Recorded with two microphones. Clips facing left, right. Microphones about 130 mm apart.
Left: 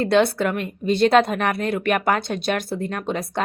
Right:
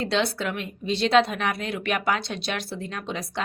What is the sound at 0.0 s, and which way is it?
A woman's voice, 55° left (ahead or behind).